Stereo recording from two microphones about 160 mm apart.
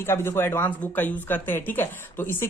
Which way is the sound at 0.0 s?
15° left (ahead or behind).